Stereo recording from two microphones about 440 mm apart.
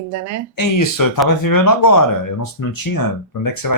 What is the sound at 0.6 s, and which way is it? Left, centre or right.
Speech, left.